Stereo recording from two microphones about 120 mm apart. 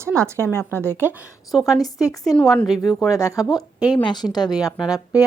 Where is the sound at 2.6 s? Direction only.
Centre (ahead or behind).